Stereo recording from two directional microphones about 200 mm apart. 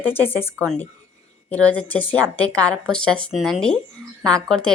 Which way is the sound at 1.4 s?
5° left (ahead or behind).